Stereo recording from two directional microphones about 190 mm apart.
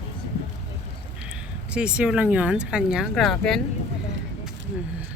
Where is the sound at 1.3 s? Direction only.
5° right (ahead or behind).